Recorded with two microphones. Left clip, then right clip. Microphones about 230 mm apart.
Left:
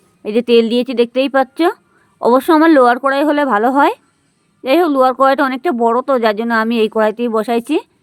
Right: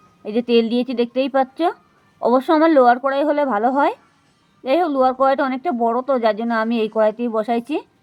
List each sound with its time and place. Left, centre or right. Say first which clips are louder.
0.3 s speech: left 6 dB; left